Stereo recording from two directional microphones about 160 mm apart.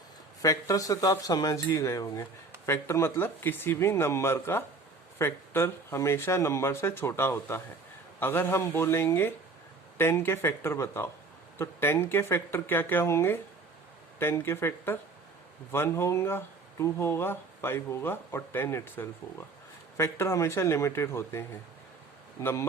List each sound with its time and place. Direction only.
0.4 s speech: 20° left (ahead or behind)